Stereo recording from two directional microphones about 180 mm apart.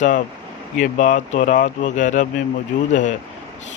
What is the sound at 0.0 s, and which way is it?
Speech, 45° left (ahead or behind).